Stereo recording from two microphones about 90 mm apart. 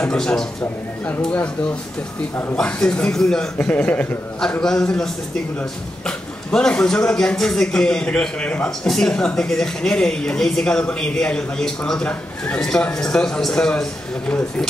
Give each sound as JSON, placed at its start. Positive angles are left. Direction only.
{"t": 0.0, "sound": "speech", "side_deg": 10}
{"t": 1.0, "sound": "speech", "side_deg": 20}
{"t": 2.5, "sound": "speech", "side_deg": 10}
{"t": 3.5, "sound": "speech", "side_deg": 15}
{"t": 4.4, "sound": "speech", "side_deg": 5}